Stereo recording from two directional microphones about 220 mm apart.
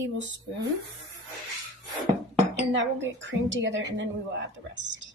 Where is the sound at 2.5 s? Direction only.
55° right (ahead or behind).